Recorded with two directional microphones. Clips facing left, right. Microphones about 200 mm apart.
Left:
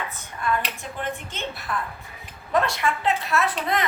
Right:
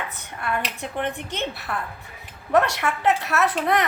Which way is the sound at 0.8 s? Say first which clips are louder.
Right 3 dB; 65° right (ahead or behind).